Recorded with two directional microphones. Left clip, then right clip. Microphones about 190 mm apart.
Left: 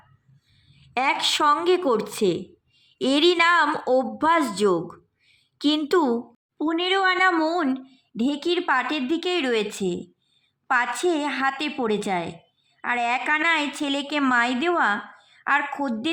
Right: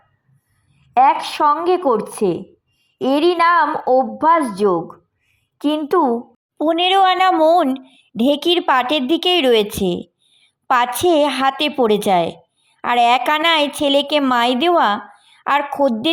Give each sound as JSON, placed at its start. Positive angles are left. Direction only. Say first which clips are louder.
{"t": 0.9, "sound": "a woman's voice", "louder": "right 8 dB", "side_deg": -10}
{"t": 1.4, "sound": "speech", "louder": "right 4 dB", "side_deg": 10}
{"t": 1.6, "sound": "a woman's voice", "louder": "right 5 dB", "side_deg": -10}
{"t": 6.6, "sound": "speech", "louder": "right 8 dB", "side_deg": -30}
{"t": 15.3, "sound": "a sound", "louder": "right 5 dB", "side_deg": -25}
{"t": 15.8, "sound": "speech", "louder": "right 10 dB", "side_deg": -25}